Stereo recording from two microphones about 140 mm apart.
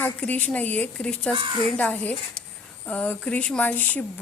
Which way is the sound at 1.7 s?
10° left (ahead or behind).